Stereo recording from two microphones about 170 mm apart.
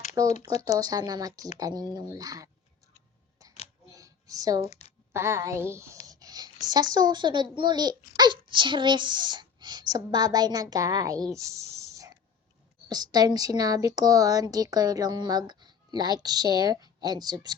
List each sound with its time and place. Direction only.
0.3 s speech: 40° left (ahead or behind)
0.6 s a woman's voice: 20° right (ahead or behind)
3.8 s a sound: 20° right (ahead or behind)
5.1 s a woman's voice: 15° right (ahead or behind)
6.1 s a sound: 20° right (ahead or behind)
6.9 s a woman's voice: 25° right (ahead or behind)